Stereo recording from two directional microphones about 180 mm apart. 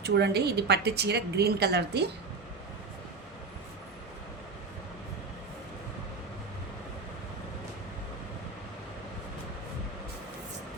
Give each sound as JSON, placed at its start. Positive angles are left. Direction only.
{"t": 0.0, "sound": "speech", "side_deg": -65}